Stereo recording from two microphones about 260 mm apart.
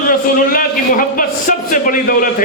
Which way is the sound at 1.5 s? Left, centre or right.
Left.